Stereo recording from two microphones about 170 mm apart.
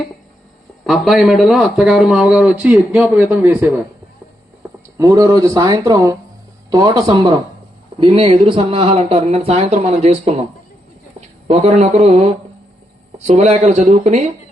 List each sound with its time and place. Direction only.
0.9 s a man's voice: centre (ahead or behind)
4.9 s speech: 20° right (ahead or behind); by 10.4 s 40° right (ahead or behind)
11.4 s speech: 40° right (ahead or behind)